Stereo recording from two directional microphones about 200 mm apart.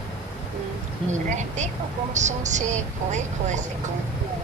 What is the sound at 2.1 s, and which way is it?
Speech, 35° right (ahead or behind).